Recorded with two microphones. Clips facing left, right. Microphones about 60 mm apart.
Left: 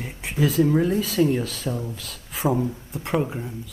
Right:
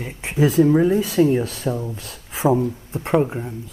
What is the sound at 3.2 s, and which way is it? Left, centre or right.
Speech, centre.